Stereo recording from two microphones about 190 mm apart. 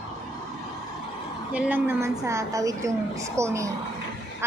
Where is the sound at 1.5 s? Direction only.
10° right (ahead or behind).